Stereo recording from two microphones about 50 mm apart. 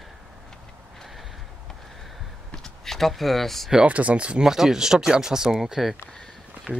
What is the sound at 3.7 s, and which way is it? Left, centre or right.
Speech, right.